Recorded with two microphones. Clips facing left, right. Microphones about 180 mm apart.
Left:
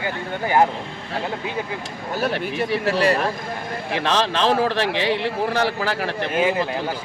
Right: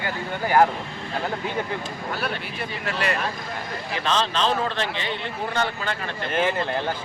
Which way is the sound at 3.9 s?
70° left (ahead or behind).